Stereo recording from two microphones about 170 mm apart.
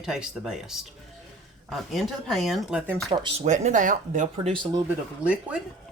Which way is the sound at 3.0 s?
25° right (ahead or behind).